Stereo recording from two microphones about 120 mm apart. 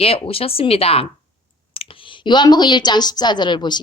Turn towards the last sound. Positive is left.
turn(degrees=40)  # may be behind; listen again after turning